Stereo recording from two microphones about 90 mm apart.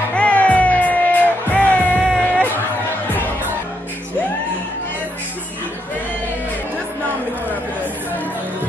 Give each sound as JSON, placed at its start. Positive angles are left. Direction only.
{"t": 0.1, "sound": "music", "side_deg": 15}